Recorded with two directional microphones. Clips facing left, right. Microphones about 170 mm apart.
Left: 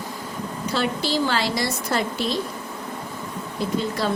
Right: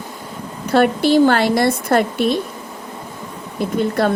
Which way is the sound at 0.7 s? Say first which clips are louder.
Right 11 dB; 55° right (ahead or behind).